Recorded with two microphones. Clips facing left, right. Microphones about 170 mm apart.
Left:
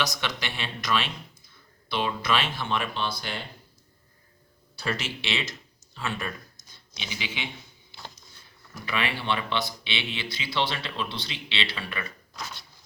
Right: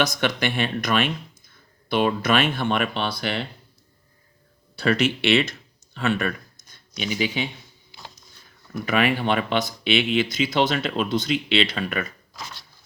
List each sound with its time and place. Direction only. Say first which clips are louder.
0.0 s speech: right 8 dB; 55° right (ahead or behind); by 3.4 s 70° right (ahead or behind)
4.8 s speech: right 11 dB; 65° right (ahead or behind)
8.9 s speech: right 8 dB; 45° right (ahead or behind)